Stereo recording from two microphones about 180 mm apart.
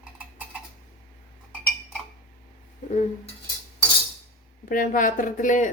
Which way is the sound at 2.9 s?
40° left (ahead or behind).